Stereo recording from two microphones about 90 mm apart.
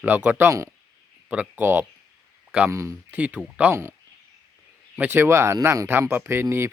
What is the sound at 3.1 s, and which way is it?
Speech, 20° right (ahead or behind).